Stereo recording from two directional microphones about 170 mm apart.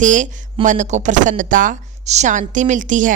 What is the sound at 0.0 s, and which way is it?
A woman's voice, 50° right (ahead or behind).